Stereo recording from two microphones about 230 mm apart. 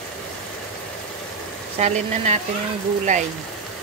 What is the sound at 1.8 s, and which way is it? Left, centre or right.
Speech, right.